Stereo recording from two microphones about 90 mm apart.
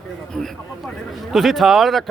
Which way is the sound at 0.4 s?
10° left (ahead or behind).